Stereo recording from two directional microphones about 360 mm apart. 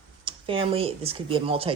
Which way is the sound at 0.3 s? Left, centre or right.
Centre.